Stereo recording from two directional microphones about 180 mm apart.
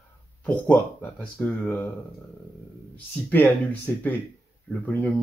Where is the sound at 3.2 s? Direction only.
10° left (ahead or behind).